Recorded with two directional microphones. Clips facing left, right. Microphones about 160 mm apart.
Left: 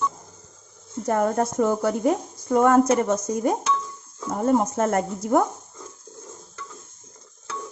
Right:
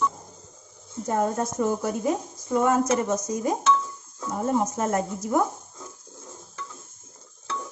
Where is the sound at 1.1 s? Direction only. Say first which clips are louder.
Left 3 dB; 60° left (ahead or behind).